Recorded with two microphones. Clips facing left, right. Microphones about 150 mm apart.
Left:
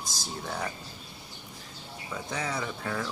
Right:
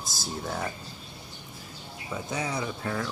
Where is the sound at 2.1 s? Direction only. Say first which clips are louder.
Right 2 dB; 15° right (ahead or behind).